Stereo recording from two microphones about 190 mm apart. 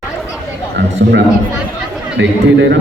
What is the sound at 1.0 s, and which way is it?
A man's voice, 70° right (ahead or behind).